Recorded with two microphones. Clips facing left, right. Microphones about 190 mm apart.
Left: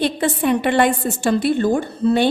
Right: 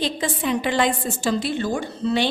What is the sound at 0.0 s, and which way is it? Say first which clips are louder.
A woman's voice: left 5 dB; 60° left (ahead or behind).